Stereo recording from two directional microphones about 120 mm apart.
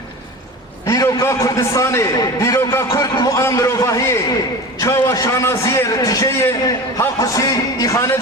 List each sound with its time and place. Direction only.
0.9 s a man's voice: 25° left (ahead or behind)